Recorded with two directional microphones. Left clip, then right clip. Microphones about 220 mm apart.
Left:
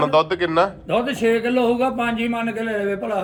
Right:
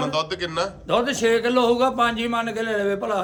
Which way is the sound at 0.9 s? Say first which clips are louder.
Left 1 dB; 45° right (ahead or behind).